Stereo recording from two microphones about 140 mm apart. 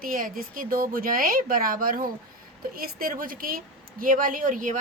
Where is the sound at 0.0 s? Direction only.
80° right.